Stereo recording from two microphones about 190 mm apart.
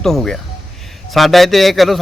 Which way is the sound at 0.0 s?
Centre (ahead or behind).